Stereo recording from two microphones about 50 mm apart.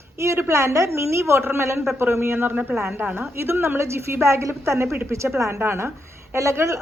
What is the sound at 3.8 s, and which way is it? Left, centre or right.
A woman's voice, right.